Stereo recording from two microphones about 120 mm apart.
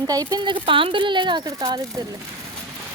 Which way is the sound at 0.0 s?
30° right (ahead or behind).